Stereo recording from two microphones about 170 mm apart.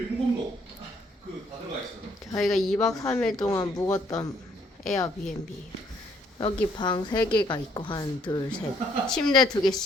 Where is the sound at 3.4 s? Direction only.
20° left (ahead or behind).